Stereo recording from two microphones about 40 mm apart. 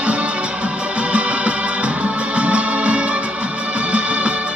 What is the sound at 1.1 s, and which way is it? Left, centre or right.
Music, right.